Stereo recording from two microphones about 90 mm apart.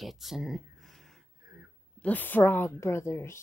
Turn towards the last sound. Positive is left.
turn(degrees=30)  # may be behind; listen again after turning